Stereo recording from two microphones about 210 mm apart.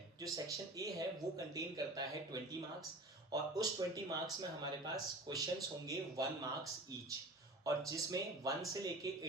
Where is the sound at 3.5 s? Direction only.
15° right (ahead or behind).